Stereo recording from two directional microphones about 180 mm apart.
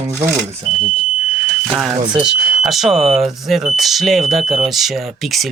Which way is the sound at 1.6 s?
Centre (ahead or behind).